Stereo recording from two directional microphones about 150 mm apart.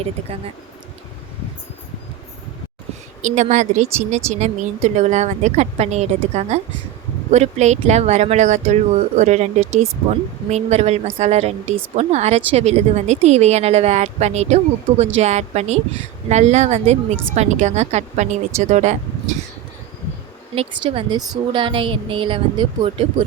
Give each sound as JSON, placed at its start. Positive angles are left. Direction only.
{"t": 3.2, "sound": "speech", "side_deg": -50}
{"t": 20.6, "sound": "a woman's voice", "side_deg": -35}